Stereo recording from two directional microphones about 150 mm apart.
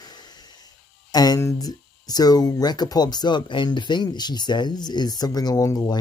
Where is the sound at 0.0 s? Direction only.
30° left (ahead or behind).